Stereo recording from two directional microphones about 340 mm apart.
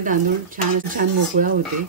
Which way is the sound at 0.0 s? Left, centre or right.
Right.